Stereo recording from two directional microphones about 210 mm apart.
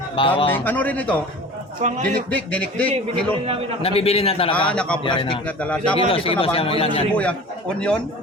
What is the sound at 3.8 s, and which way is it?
Speech, 25° left (ahead or behind).